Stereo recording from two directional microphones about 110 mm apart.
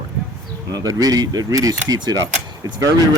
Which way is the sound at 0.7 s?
35° right (ahead or behind).